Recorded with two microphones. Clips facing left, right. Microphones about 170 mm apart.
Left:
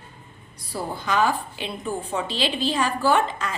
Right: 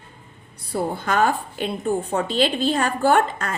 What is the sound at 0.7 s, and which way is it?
A woman's voice, 55° right (ahead or behind).